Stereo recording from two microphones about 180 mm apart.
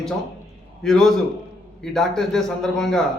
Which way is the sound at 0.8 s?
Centre (ahead or behind).